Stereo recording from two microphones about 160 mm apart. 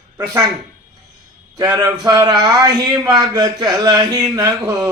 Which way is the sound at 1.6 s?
20° right (ahead or behind).